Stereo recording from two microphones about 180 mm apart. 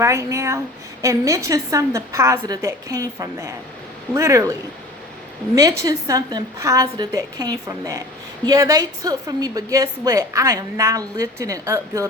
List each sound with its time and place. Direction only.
0.0 s a woman's voice: 15° right (ahead or behind)
5.5 s a woman's voice: 20° right (ahead or behind)